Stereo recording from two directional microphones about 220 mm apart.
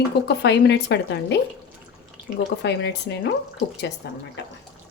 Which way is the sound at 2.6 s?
50° left (ahead or behind).